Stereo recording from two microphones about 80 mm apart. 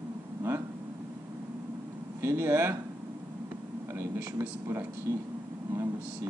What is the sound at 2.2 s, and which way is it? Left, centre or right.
Speech, right.